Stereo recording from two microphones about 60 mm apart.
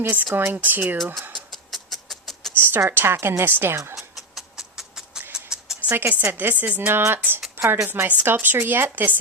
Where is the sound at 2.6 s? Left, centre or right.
Right.